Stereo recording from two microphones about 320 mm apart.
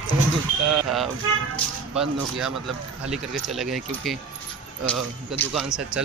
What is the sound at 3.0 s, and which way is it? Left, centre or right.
Speech, centre.